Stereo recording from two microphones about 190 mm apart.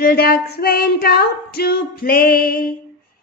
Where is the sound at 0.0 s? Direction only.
50° left (ahead or behind).